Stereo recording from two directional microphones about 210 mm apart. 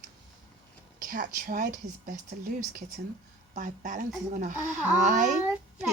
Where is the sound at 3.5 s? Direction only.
35° right (ahead or behind).